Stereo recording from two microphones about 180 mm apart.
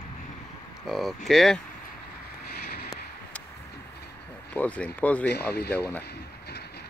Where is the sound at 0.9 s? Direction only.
Centre (ahead or behind).